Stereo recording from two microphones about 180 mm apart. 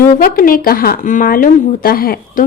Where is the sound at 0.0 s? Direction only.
55° left (ahead or behind).